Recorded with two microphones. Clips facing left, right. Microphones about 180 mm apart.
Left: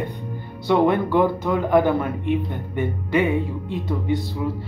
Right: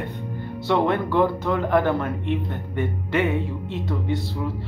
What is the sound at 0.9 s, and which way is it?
A man's voice, 15° left (ahead or behind).